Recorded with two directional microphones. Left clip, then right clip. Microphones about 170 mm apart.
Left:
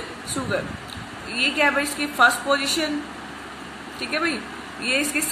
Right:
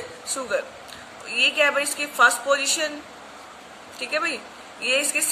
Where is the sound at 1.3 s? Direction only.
55° right (ahead or behind).